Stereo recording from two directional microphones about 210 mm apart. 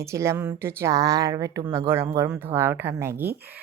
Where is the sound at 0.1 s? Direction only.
15° right (ahead or behind).